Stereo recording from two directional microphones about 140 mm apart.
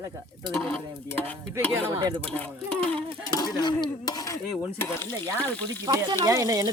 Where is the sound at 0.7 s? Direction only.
10° left (ahead or behind).